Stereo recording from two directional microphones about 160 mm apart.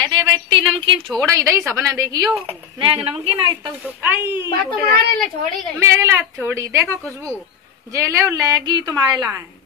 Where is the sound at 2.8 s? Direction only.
35° right (ahead or behind).